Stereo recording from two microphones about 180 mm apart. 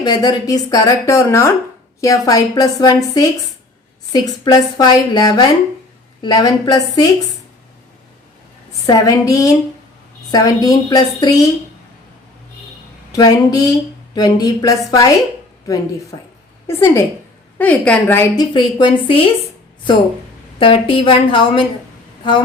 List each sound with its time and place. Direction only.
0.0 s speech: 20° left (ahead or behind)
8.9 s speech: 20° left (ahead or behind)
13.1 s speech: 20° left (ahead or behind)
16.6 s a woman's voice: 15° left (ahead or behind)
18.5 s speech: 25° left (ahead or behind)
20.6 s speech: 30° left (ahead or behind)